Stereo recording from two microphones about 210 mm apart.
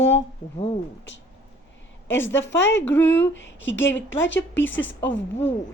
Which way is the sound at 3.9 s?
10° left (ahead or behind).